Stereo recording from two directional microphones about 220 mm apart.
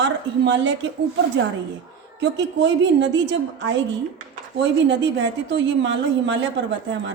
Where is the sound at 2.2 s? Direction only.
55° right (ahead or behind).